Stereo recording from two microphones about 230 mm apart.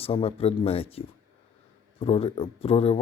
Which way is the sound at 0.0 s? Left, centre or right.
Left.